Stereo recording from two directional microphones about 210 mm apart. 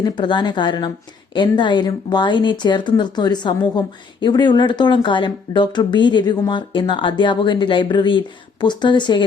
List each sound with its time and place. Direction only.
0.0 s speech: 20° left (ahead or behind)